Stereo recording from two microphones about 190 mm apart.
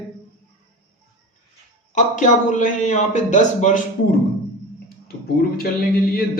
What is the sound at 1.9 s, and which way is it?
Speech, 40° left (ahead or behind).